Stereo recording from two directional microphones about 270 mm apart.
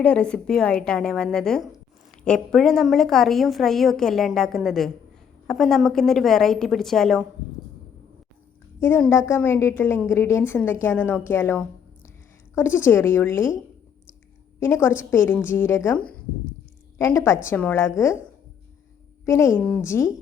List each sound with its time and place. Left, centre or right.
0.0 s a woman's voice: centre
8.8 s a woman's voice: centre
14.6 s a woman's voice: centre
19.2 s a woman's voice: centre